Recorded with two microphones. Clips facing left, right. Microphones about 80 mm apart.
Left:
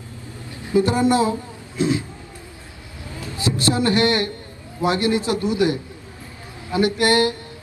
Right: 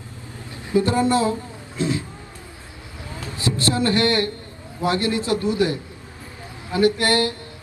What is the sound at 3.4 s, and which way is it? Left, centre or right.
Speech, left.